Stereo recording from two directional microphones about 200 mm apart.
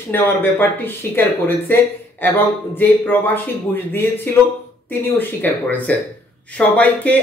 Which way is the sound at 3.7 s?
10° left (ahead or behind).